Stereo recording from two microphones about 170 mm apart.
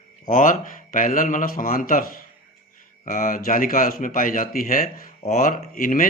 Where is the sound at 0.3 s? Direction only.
50° left (ahead or behind).